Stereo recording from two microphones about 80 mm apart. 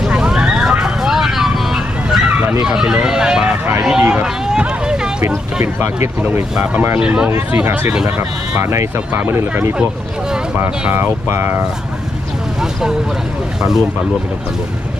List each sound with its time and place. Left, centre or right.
0.0 s vehicle: centre
2.6 s speech: centre
6.0 s speech: right
7.0 s speech: centre
7.3 s speech: right
8.5 s speech: right
9.1 s speech: right
9.4 s speech: right
10.9 s speech: right
13.6 s speech: centre